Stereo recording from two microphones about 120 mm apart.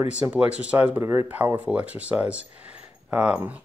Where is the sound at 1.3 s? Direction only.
15° right (ahead or behind).